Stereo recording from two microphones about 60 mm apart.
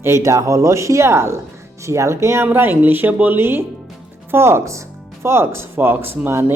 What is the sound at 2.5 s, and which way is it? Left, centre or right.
Speech, right.